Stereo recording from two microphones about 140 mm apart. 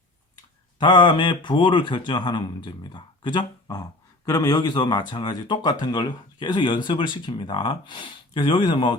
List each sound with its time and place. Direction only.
0.8 s a man's voice: 30° left (ahead or behind)